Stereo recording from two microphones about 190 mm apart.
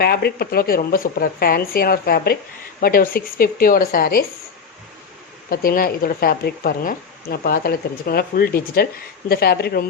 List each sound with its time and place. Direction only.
0.0 s speech: 55° left (ahead or behind)
5.5 s speech: 50° left (ahead or behind)